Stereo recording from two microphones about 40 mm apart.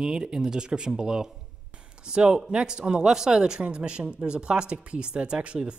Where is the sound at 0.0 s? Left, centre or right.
Right.